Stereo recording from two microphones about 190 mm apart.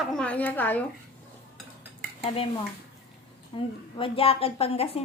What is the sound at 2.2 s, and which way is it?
Speech, 30° left (ahead or behind).